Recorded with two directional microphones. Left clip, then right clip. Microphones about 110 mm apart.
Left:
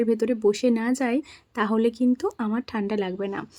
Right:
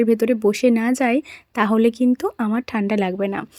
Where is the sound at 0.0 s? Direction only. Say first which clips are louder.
Right 5 dB; 25° right (ahead or behind).